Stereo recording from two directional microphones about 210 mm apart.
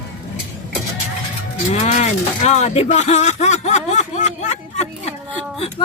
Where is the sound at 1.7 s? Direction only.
35° left (ahead or behind).